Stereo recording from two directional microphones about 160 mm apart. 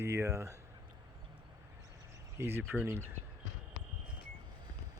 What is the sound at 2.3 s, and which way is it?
Speech, 15° right (ahead or behind).